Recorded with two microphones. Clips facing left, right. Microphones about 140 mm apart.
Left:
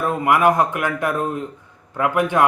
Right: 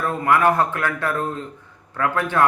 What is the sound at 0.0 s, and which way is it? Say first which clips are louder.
Speech: left 2 dB; 15° left (ahead or behind).